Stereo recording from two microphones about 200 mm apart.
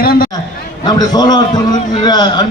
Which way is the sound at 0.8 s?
20° left (ahead or behind).